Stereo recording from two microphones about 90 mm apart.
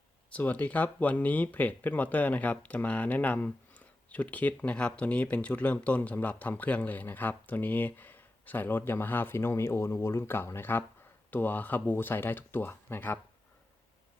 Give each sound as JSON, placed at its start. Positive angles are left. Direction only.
{"t": 0.3, "sound": "speech", "side_deg": 20}